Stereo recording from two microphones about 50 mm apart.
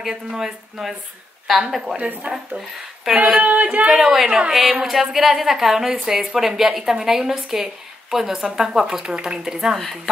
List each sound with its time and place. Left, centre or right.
0.1 s a woman's voice: centre
2.0 s speech: right
2.6 s a woman's voice: centre
3.3 s a woman's voice: right